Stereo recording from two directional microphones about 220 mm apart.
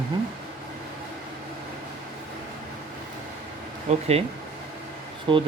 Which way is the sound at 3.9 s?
30° right (ahead or behind).